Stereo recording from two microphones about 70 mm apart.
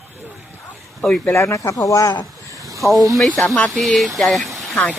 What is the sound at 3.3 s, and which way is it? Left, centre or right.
Speech, centre.